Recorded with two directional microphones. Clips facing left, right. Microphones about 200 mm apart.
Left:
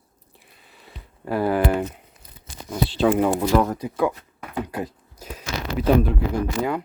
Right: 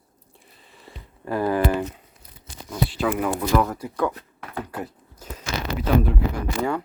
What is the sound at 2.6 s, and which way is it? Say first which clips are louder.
Speech: left 4 dB; 25° left (ahead or behind).